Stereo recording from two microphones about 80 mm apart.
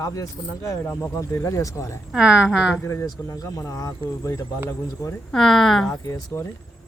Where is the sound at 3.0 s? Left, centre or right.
Left.